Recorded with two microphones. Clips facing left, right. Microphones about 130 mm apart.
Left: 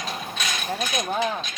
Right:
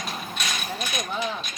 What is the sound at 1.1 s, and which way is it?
Speech, 45° left (ahead or behind).